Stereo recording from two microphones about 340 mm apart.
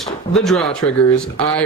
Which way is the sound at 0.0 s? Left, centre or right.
Centre.